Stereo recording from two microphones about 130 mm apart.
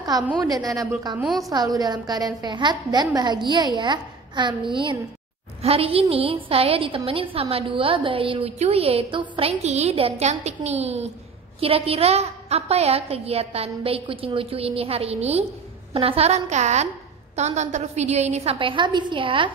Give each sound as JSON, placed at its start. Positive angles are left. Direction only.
{"t": 0.4, "sound": "a woman's voice", "side_deg": -30}
{"t": 1.2, "sound": "a woman's voice", "side_deg": 0}
{"t": 1.5, "sound": "a woman's voice", "side_deg": -30}
{"t": 5.6, "sound": "a woman's voice", "side_deg": -50}